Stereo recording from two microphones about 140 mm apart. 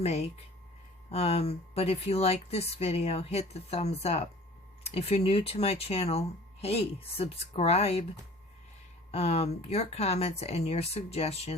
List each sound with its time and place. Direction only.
0.0 s speech: 50° left (ahead or behind)
9.1 s speech: 50° left (ahead or behind)